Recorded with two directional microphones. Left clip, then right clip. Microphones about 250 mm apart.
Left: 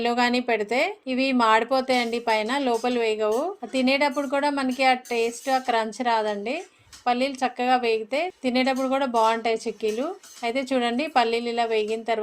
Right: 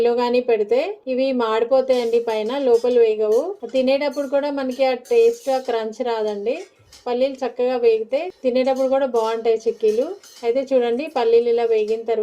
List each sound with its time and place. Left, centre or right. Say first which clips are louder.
0.2 s speech: right 5 dB; left
10.4 s speech: right 6 dB; left